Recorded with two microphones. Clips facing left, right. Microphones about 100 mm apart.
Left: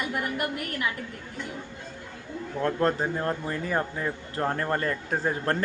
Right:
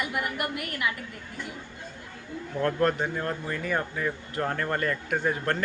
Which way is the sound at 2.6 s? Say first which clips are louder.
Even; 20° left (ahead or behind).